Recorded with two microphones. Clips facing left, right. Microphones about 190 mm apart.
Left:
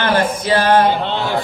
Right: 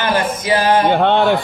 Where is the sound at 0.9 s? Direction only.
60° right (ahead or behind).